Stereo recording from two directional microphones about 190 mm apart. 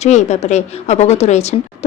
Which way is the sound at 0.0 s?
35° left (ahead or behind).